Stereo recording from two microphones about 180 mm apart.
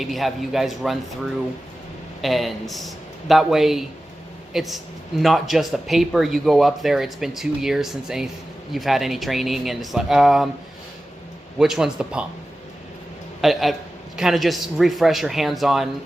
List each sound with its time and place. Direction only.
0.0 s speech: centre (ahead or behind)
11.6 s speech: 5° right (ahead or behind)
13.4 s speech: centre (ahead or behind)